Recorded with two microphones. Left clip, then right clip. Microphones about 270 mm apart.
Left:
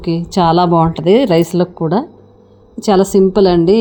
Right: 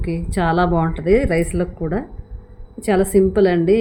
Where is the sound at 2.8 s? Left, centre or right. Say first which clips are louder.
Left 5 dB; centre.